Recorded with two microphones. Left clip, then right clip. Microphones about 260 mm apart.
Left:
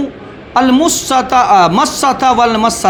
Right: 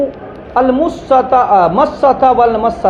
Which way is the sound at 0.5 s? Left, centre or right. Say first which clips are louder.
Left 1 dB; left.